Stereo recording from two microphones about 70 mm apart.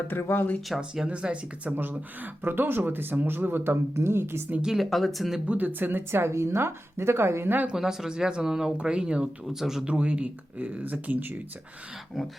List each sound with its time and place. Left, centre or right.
0.1 s speech: left
0.8 s speech: centre; by 4.4 s right
4.6 s speech: centre
5.5 s a woman's voice: right
7.7 s speech: centre
9.8 s speech: centre